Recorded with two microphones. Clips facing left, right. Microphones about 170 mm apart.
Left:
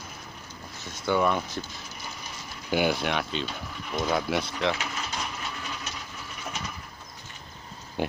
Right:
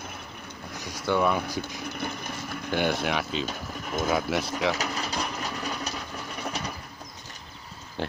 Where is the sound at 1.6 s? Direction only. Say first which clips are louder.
Right 8 dB; 60° right (ahead or behind).